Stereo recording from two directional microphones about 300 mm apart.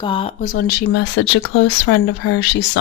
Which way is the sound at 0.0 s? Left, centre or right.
Centre.